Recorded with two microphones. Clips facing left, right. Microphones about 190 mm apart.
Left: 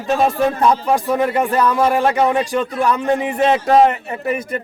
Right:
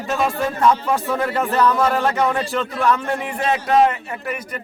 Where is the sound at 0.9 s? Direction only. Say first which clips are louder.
Left 4 dB; 15° left (ahead or behind).